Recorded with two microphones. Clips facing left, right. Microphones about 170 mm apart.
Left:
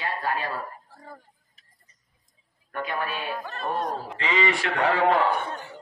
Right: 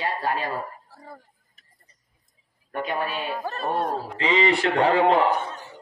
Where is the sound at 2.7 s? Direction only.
20° right (ahead or behind).